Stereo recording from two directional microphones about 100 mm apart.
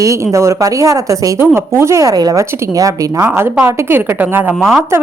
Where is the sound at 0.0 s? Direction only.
30° right (ahead or behind).